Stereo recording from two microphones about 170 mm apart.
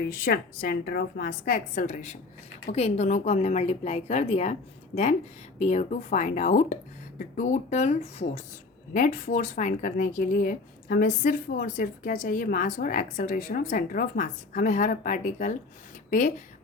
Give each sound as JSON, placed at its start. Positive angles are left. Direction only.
{"t": 0.1, "sound": "a woman's voice", "side_deg": 60}
{"t": 5.5, "sound": "speech", "side_deg": 40}